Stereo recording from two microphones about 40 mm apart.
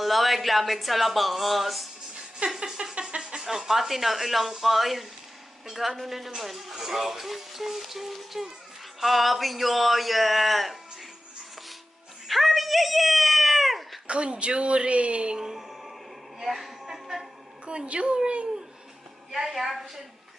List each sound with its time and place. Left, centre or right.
0.0 s speech: centre
2.6 s a sound: centre
3.2 s a woman's voice: centre
12.3 s a sound: centre
14.1 s a woman's voice: right
15.4 s a sound: centre
16.4 s music: centre
17.7 s a woman's voice: right
19.3 s speech: centre